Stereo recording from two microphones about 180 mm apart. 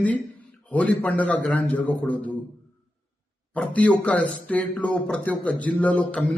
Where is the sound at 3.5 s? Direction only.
10° left (ahead or behind).